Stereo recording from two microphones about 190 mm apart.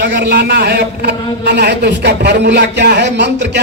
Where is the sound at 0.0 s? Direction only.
60° right (ahead or behind).